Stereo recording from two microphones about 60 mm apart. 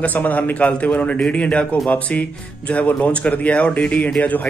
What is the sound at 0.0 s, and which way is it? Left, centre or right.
A man's voice, left.